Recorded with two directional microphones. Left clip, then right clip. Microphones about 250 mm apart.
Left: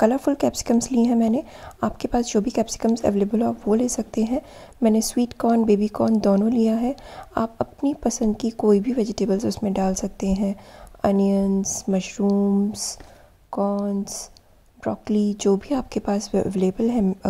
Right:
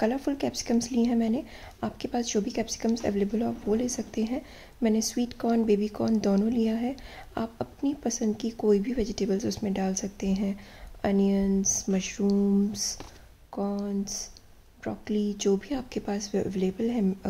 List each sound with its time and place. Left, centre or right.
0.0 s speech: left